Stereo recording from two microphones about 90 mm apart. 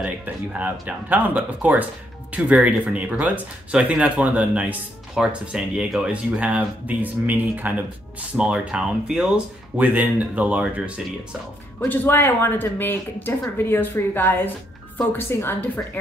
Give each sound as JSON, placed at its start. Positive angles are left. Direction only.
{"t": 0.0, "sound": "speech", "side_deg": -15}
{"t": 11.8, "sound": "speech", "side_deg": 20}